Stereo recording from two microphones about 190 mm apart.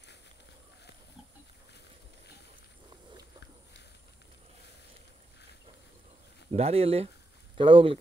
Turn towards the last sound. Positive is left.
turn(degrees=-25)  # may be behind; listen again after turning